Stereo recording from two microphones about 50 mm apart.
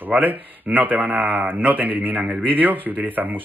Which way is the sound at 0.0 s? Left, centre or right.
Right.